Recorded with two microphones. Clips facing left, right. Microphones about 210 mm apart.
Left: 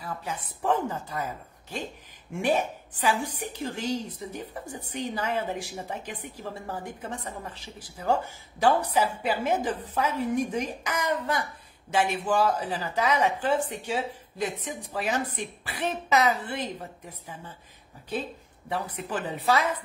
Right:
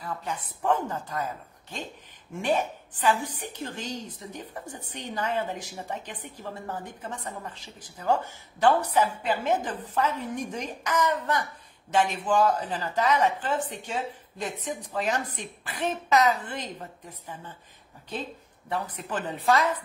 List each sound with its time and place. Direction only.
0.0 s a woman's voice: 5° left (ahead or behind)
2.4 s a woman's voice: 10° left (ahead or behind)
18.7 s a woman's voice: 10° left (ahead or behind)